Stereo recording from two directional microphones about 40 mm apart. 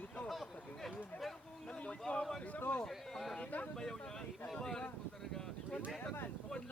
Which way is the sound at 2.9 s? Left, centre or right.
Centre.